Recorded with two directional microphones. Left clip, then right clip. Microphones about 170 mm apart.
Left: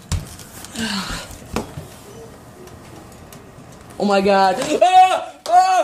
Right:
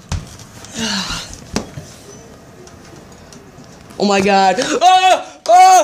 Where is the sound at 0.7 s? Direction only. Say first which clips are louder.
Right 4 dB; 30° right (ahead or behind).